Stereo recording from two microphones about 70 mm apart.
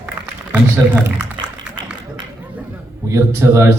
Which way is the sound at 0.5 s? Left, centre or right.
Right.